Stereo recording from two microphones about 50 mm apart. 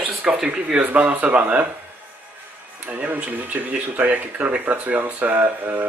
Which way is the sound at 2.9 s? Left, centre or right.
Right.